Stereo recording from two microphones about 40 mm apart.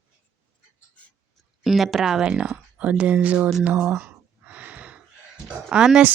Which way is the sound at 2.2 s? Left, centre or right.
Right.